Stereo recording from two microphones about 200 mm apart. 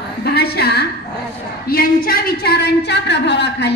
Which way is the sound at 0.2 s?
55° left (ahead or behind).